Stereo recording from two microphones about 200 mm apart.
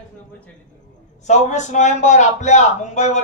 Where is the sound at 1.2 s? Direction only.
35° left (ahead or behind).